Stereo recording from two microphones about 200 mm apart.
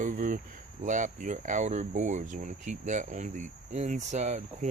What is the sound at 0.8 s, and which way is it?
Speech, 40° right (ahead or behind).